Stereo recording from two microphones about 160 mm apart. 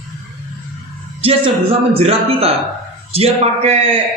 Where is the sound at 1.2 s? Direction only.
35° right (ahead or behind).